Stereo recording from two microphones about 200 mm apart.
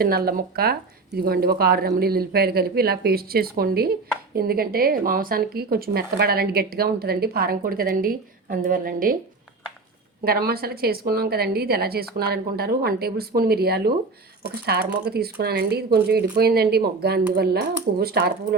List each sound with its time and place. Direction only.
0.0 s speech: 50° right (ahead or behind)
10.2 s speech: 50° right (ahead or behind)